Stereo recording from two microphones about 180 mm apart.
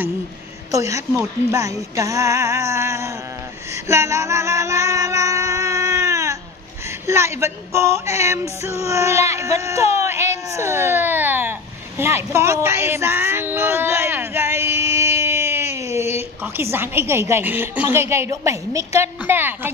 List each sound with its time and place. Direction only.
0.7 s a woman's voice: 15° right (ahead or behind)
3.8 s music: 15° right (ahead or behind)
7.1 s speech: 15° right (ahead or behind)
12.0 s a sound: 15° right (ahead or behind)
16.7 s a woman's voice: 10° right (ahead or behind)